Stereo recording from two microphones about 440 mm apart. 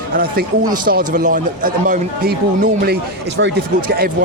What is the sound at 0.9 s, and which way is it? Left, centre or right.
A man's voice, centre.